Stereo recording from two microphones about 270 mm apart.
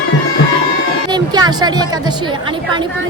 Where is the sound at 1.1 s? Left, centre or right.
Centre.